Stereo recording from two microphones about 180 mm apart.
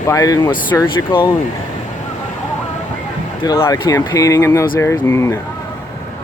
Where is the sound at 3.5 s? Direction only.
20° left (ahead or behind).